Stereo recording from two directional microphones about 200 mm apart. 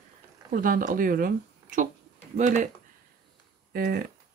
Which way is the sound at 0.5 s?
45° right (ahead or behind).